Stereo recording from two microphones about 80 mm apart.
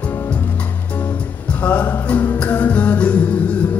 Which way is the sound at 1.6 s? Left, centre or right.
Left.